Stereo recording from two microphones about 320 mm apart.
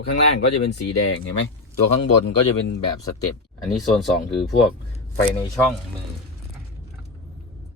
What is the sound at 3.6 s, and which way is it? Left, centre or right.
Speech, centre.